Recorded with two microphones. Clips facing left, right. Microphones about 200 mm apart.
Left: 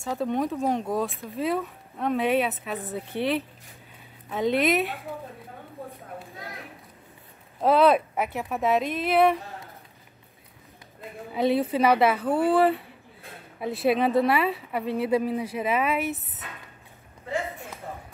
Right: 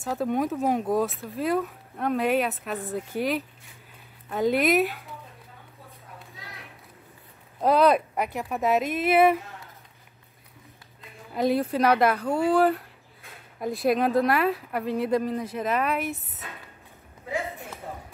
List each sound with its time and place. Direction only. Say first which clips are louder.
0.0 s speech: right 1 dB; 5° right (ahead or behind)
4.3 s speech: right 1 dB; centre (ahead or behind)
5.8 s a sound: left 13 dB; 55° left (ahead or behind)
7.6 s speech: left 1 dB; centre (ahead or behind)
11.3 s speech: left 1 dB; centre (ahead or behind)